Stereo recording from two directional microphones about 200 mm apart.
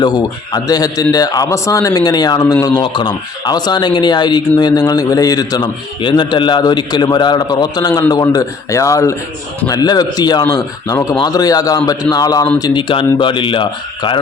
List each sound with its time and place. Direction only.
0.0 s speech: 20° left (ahead or behind)